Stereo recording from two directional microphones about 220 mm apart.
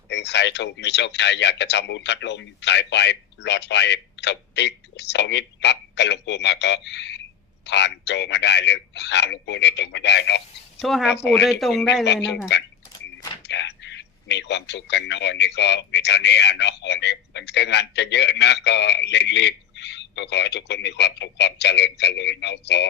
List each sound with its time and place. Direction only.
0.1 s a man's voice: 50° left (ahead or behind)
10.8 s speech: centre (ahead or behind)
12.0 s a man's voice: 50° left (ahead or behind)
13.5 s a man's voice: 55° left (ahead or behind)